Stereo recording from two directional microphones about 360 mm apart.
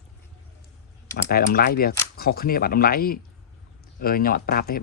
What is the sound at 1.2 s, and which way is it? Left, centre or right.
Speech, left.